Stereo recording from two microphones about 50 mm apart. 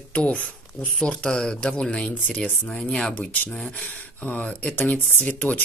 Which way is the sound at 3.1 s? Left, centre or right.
Left.